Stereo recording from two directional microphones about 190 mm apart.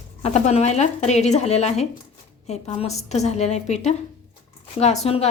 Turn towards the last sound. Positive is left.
turn(degrees=30)  # may be behind; listen again after turning